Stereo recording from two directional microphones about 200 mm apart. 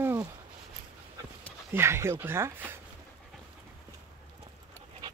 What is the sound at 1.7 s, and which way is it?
Speech, 15° right (ahead or behind).